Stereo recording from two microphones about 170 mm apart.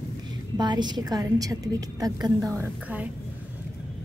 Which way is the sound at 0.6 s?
25° right (ahead or behind).